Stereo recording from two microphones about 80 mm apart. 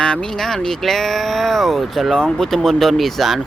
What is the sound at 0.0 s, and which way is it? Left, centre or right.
Speech, centre.